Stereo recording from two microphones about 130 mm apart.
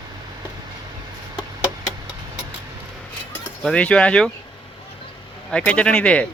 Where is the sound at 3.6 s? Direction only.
10° left (ahead or behind).